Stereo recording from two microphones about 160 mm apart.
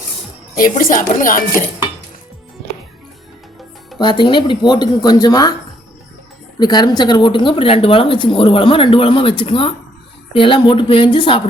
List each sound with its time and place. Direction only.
0.5 s speech: 60° left (ahead or behind)
3.9 s speech: 30° left (ahead or behind)
6.6 s speech: 25° left (ahead or behind)